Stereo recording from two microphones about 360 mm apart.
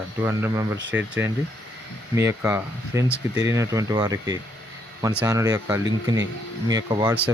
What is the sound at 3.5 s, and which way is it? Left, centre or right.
Speech, centre.